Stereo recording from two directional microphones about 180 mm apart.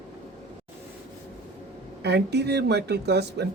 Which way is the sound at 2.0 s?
70° right (ahead or behind).